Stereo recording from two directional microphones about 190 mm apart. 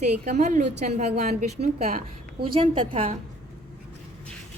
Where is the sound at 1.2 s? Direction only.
50° right (ahead or behind).